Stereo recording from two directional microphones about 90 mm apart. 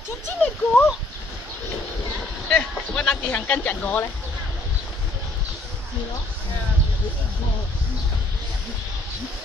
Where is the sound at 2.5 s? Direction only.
10° left (ahead or behind).